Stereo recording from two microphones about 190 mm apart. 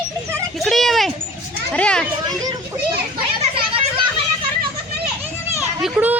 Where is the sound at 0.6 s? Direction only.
Centre (ahead or behind).